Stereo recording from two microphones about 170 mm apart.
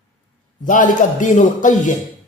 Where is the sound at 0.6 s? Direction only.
50° left (ahead or behind).